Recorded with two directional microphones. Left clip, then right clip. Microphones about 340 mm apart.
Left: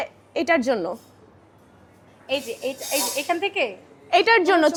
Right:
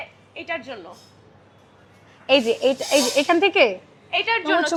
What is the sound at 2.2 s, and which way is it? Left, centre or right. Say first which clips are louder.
A woman's voice: right 9 dB; right.